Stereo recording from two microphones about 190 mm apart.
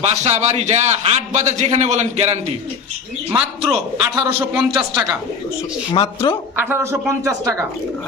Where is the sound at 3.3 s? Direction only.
5° right (ahead or behind).